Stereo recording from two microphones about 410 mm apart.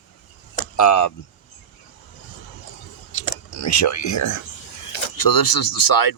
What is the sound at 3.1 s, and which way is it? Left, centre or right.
Speech, left.